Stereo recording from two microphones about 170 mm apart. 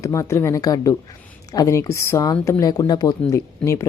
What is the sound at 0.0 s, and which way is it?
Speech, 20° left (ahead or behind).